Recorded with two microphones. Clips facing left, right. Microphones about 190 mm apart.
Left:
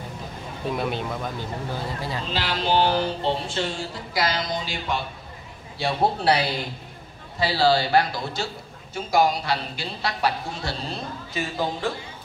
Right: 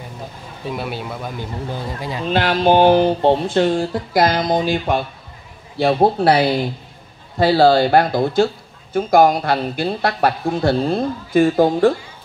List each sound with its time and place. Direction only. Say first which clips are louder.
0.7 s speech: right 1 dB; 5° right (ahead or behind)
2.0 s speech: right 4 dB; 15° right (ahead or behind)
2.2 s a woman's voice: right 12 dB; 55° right (ahead or behind)